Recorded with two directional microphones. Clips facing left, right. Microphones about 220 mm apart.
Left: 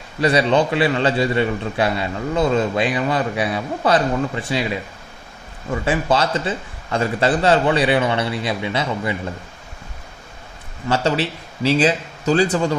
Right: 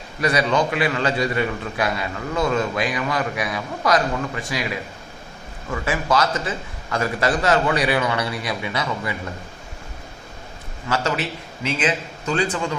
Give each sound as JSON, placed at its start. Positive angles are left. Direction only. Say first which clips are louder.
{"t": 0.2, "sound": "a man's voice", "louder": "left 4 dB", "side_deg": 30}
{"t": 10.8, "sound": "a man's voice", "louder": "left 4 dB", "side_deg": 30}